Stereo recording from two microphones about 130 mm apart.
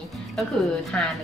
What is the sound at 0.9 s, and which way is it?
Speech, 5° left (ahead or behind).